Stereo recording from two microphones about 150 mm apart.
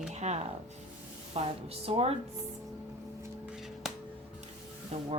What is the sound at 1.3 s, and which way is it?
Speech, 40° right (ahead or behind).